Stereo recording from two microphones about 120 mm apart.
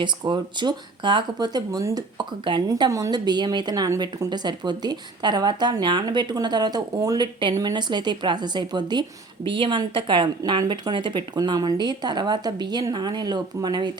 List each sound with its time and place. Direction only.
0.0 s a woman's voice: 40° right (ahead or behind)